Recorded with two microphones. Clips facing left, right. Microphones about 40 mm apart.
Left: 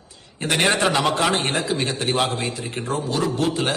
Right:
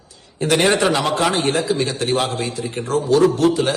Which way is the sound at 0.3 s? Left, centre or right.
Left.